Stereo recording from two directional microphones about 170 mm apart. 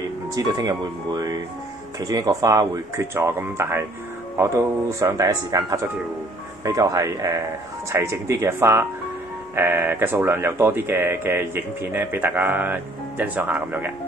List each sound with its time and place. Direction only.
0.3 s speech: 20° right (ahead or behind)